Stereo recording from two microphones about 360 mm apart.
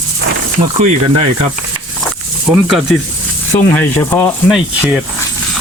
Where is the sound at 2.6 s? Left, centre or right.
Centre.